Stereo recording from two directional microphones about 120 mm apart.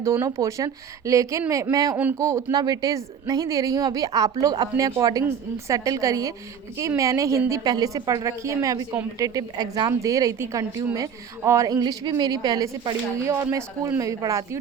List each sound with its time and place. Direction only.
0.0 s a woman's voice: 25° right (ahead or behind)